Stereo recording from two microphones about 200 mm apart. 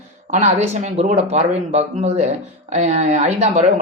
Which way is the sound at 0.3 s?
35° right (ahead or behind).